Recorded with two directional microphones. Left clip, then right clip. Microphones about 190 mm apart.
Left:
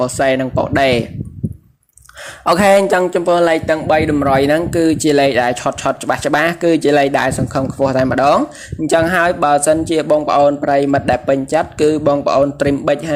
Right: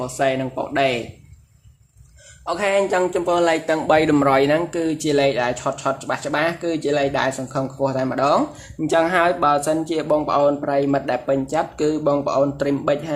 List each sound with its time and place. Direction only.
0.0 s speech: 35° left (ahead or behind)
2.4 s speech: 45° left (ahead or behind)
3.0 s speech: 25° left (ahead or behind)
3.8 s a man's voice: 5° left (ahead or behind)
4.3 s speech: 20° left (ahead or behind)